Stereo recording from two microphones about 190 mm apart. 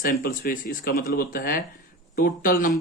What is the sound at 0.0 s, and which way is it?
Speech, 45° left (ahead or behind).